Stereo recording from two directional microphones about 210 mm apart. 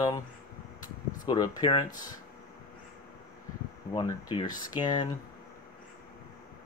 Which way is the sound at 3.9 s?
20° left (ahead or behind).